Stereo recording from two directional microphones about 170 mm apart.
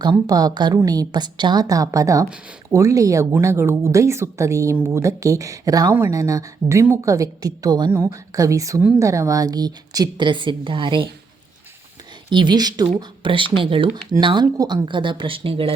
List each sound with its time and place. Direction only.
0.0 s speech: 25° right (ahead or behind)
12.3 s speech: 25° right (ahead or behind)